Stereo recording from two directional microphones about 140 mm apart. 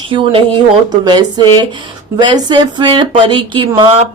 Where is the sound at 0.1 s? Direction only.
40° right (ahead or behind).